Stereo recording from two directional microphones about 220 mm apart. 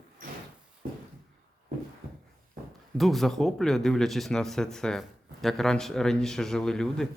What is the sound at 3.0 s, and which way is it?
Speech, centre (ahead or behind).